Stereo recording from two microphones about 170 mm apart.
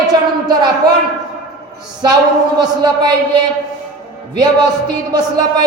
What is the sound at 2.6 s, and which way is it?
Speech, 25° right (ahead or behind).